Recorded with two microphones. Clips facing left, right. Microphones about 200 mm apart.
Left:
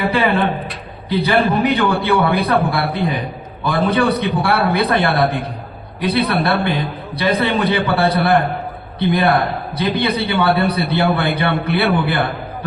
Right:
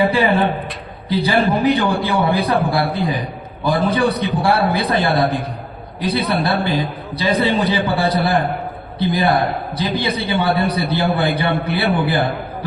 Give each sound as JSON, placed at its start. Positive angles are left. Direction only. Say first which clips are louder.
{"t": 1.1, "sound": "a man's voice", "louder": "left 1 dB", "side_deg": 60}